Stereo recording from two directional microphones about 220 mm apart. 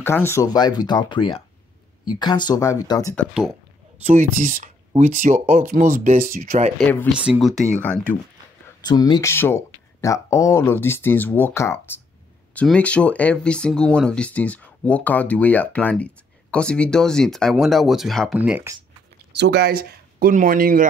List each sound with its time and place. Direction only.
0.0 s speech: 10° left (ahead or behind)
4.0 s speech: 35° right (ahead or behind)
6.8 s speech: 5° left (ahead or behind)
8.8 s speech: 20° left (ahead or behind); by 18.8 s 10° right (ahead or behind)
19.3 s speech: 50° right (ahead or behind)